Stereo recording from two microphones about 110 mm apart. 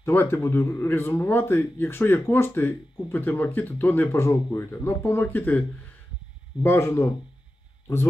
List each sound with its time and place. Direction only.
0.0 s a man's voice: 20° left (ahead or behind)
6.6 s a man's voice: 20° left (ahead or behind)